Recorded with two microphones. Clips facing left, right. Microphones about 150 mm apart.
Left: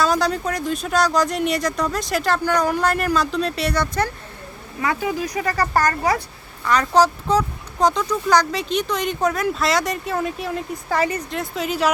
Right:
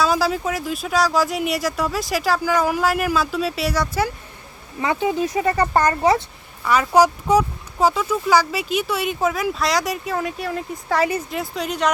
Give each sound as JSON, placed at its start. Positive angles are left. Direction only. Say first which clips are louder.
{"t": 0.0, "sound": "speech", "louder": "even", "side_deg": -5}
{"t": 4.8, "sound": "speech", "louder": "right 2 dB", "side_deg": -25}
{"t": 6.7, "sound": "speech", "louder": "right 1 dB", "side_deg": -10}